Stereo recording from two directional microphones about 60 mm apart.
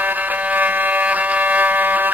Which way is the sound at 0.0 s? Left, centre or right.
Right.